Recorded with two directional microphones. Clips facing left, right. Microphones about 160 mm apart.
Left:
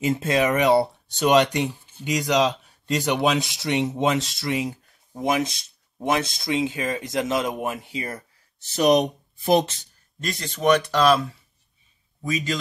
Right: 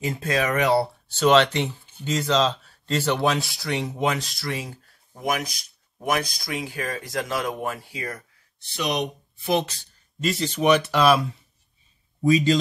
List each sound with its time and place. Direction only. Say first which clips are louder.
0.0 s speech: left 4 dB; 25° left (ahead or behind)
8.7 s speech: left 8 dB; 40° left (ahead or behind)
10.2 s speech: right 1 dB; 10° right (ahead or behind)
12.2 s a man's voice: right 8 dB; 35° right (ahead or behind)